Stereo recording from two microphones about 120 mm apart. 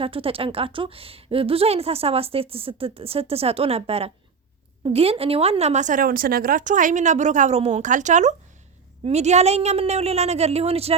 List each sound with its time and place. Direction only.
0.0 s a woman's voice: 50° right (ahead or behind); by 8.4 s 85° right
9.0 s a woman's voice: 65° right (ahead or behind)